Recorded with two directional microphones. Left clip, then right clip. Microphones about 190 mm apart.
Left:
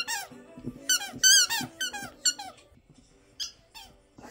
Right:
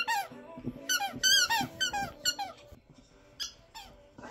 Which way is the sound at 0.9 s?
15° left (ahead or behind).